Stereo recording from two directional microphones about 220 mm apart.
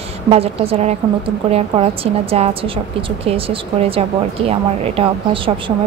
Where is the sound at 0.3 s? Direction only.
25° right (ahead or behind).